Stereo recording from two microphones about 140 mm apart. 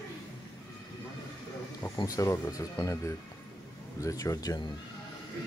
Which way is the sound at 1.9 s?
25° left (ahead or behind).